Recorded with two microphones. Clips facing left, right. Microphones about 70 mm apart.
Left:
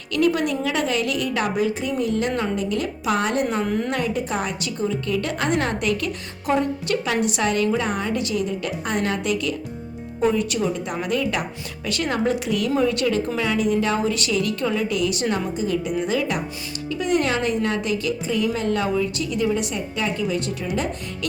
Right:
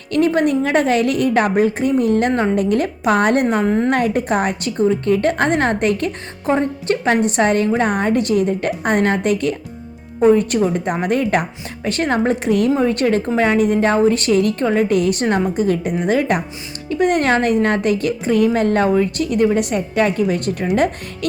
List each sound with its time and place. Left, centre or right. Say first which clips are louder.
0.1 s a woman's voice: right 5 dB; right
3.8 s a woman's voice: right 7 dB; right